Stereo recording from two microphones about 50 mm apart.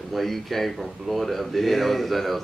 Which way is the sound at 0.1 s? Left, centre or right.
Centre.